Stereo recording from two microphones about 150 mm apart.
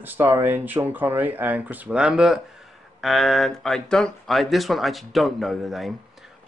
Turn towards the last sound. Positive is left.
turn(degrees=0)  # may be behind; listen again after turning